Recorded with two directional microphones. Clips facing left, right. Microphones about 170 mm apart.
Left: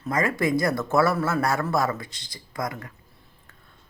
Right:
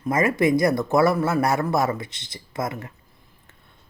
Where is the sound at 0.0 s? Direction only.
20° right (ahead or behind).